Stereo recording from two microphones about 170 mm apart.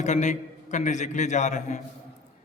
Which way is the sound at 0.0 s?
45° left (ahead or behind).